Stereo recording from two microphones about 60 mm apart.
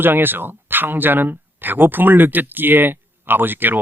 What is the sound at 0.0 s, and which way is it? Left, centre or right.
Speech, right.